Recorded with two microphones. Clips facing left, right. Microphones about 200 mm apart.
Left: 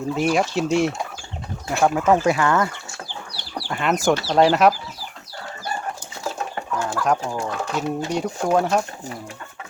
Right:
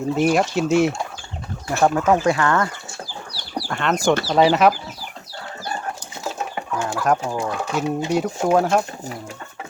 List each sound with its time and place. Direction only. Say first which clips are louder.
0.1 s speech: right 2 dB; centre (ahead or behind)
3.7 s speech: even; 5° left (ahead or behind)
6.2 s chicken: even; 15° right (ahead or behind)
6.8 s speech: right 2 dB; 5° right (ahead or behind)